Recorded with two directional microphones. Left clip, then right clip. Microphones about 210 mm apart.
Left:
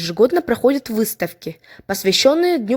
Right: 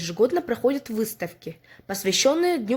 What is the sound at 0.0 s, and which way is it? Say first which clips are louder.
Speech: left 6 dB; 35° left (ahead or behind).